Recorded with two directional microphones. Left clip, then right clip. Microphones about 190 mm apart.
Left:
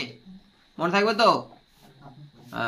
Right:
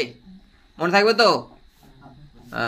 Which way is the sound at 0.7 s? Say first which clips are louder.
Right 5 dB; 20° right (ahead or behind).